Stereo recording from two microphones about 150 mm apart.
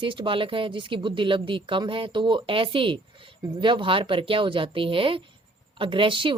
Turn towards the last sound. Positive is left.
turn(degrees=-35)  # may be behind; listen again after turning